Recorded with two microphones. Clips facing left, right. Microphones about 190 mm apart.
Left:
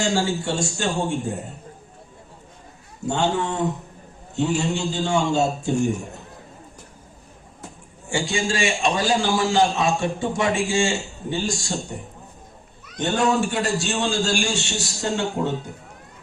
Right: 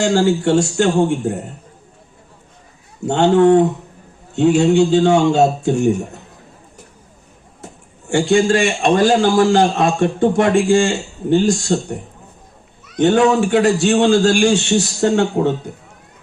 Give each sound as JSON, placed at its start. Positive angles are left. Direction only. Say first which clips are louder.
{"t": 0.1, "sound": "a man's voice", "louder": "right 9 dB", "side_deg": -65}
{"t": 3.1, "sound": "a man's voice", "louder": "right 12 dB", "side_deg": -65}
{"t": 8.1, "sound": "a man's voice", "louder": "right 11 dB", "side_deg": -60}
{"t": 13.0, "sound": "a man's voice", "louder": "right 8 dB", "side_deg": -60}